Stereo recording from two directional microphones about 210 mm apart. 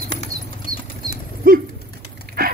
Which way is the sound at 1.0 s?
45° right (ahead or behind).